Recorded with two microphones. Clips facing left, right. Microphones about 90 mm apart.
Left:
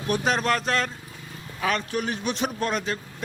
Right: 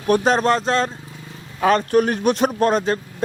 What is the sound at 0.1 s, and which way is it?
Speech, 35° right (ahead or behind).